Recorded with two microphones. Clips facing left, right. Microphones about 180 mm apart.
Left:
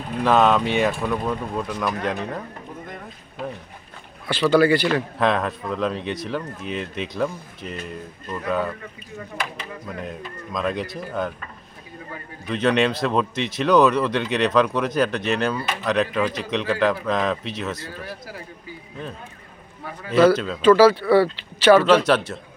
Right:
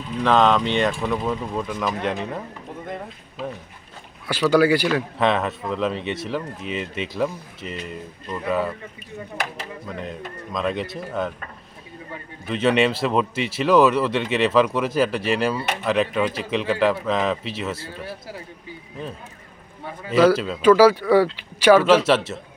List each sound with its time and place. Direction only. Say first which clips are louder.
0.2 s speech: even; 10° left (ahead or behind)
4.3 s speech: even; 10° right (ahead or behind)
9.8 s speech: even; centre (ahead or behind)
12.5 s speech: right 1 dB; 5° right (ahead or behind)
18.0 s a man's voice: right 1 dB; 30° right (ahead or behind)
19.8 s a sound: right 1 dB; 25° right (ahead or behind)
20.1 s speech: even; 10° right (ahead or behind)